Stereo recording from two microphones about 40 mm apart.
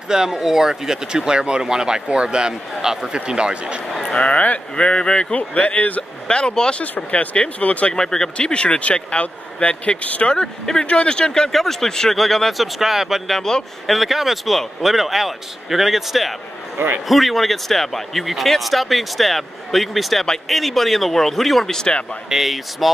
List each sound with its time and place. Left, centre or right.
0.1 s speech: centre
4.0 s speech: left
5.3 s speech: left
6.2 s speech: left
7.9 s speech: centre
8.4 s speech: left
10.3 s speech: centre
11.5 s speech: centre
13.3 s speech: centre
13.8 s speech: centre
16.7 s a man's voice: right
17.1 s speech: centre
22.3 s speech: centre